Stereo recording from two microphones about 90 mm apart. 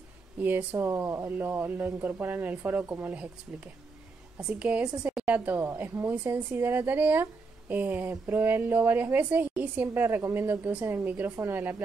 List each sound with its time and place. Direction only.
0.4 s a woman's voice: 20° right (ahead or behind)
0.7 s speech: 30° right (ahead or behind)
2.0 s a woman's voice: 20° right (ahead or behind)